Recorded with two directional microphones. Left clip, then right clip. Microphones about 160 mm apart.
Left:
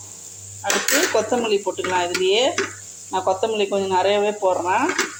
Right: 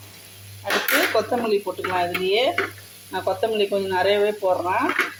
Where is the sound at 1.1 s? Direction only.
5° left (ahead or behind).